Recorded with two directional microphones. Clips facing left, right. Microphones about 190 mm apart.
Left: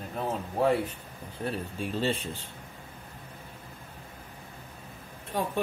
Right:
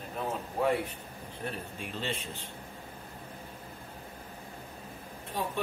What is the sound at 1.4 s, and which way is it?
Speech, 35° left (ahead or behind).